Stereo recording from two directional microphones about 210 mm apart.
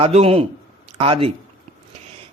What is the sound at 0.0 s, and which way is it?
Speech, 25° right (ahead or behind).